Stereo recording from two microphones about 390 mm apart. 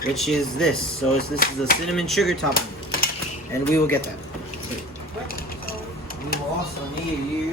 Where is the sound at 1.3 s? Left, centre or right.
Left.